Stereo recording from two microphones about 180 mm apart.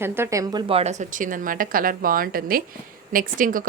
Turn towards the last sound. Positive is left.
turn(degrees=-50)  # may be behind; listen again after turning